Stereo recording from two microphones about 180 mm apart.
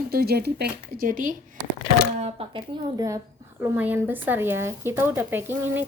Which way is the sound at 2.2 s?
35° right (ahead or behind).